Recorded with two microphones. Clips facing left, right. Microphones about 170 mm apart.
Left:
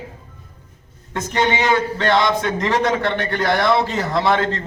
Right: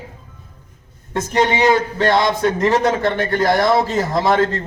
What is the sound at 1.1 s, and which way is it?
A man's voice, 35° right (ahead or behind).